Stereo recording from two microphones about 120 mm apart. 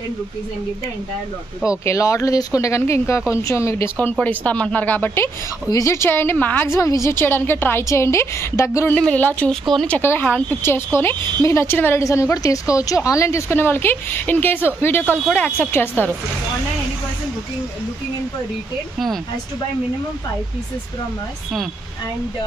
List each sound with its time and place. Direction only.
1.9 s a woman's voice: 25° left (ahead or behind)
8.9 s a woman's voice: 10° left (ahead or behind)